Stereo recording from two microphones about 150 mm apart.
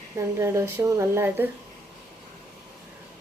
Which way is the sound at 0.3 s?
20° right (ahead or behind).